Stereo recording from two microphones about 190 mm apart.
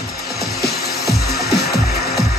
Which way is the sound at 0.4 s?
55° left (ahead or behind).